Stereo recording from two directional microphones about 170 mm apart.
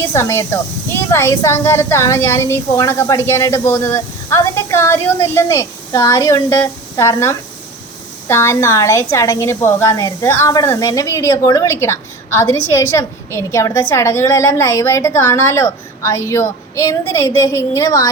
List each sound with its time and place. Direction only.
0.1 s a woman's voice: 15° left (ahead or behind)